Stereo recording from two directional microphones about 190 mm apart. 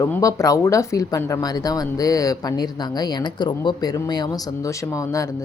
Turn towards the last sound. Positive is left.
turn(degrees=15)  # may be behind; listen again after turning